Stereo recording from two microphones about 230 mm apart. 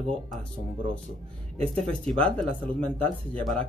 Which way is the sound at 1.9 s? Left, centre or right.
Centre.